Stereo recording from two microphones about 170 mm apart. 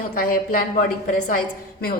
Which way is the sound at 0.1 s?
60° left (ahead or behind).